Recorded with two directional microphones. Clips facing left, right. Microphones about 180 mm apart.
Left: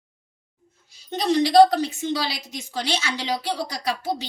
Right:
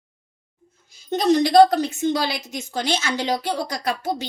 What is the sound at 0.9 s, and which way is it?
A woman's voice, 45° right (ahead or behind).